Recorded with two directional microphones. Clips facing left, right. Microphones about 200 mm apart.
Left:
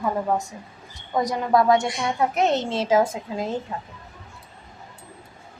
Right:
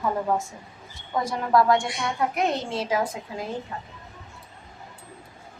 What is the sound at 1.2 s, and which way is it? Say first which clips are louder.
A woman's voice: left 1 dB; 20° left (ahead or behind).